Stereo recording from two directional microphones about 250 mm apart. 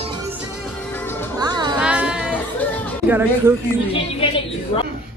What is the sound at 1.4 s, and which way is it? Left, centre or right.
Music, centre.